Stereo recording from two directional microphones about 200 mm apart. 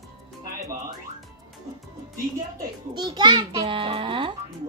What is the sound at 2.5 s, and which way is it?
A child's voice, 20° right (ahead or behind).